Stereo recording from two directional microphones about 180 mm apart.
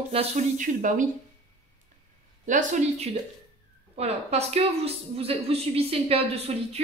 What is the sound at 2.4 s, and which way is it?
A woman's voice, 45° right (ahead or behind).